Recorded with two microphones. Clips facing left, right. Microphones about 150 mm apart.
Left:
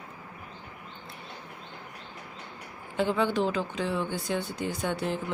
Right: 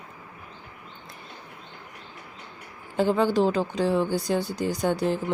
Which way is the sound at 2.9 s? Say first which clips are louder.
Right 4 dB; 35° right (ahead or behind).